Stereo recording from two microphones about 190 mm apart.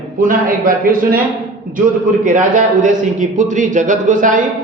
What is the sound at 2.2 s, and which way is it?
A man's voice, 45° right (ahead or behind).